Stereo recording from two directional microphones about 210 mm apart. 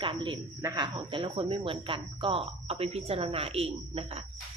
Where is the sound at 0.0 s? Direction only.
25° right (ahead or behind).